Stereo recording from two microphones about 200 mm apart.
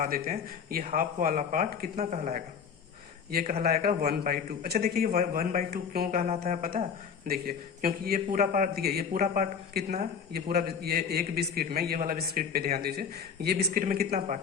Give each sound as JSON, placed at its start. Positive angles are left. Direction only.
{"t": 0.0, "sound": "a man's voice", "side_deg": -45}
{"t": 3.6, "sound": "a man's voice", "side_deg": -50}
{"t": 6.2, "sound": "a man's voice", "side_deg": -35}